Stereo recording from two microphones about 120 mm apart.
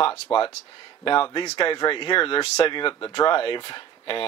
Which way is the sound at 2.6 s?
45° left (ahead or behind).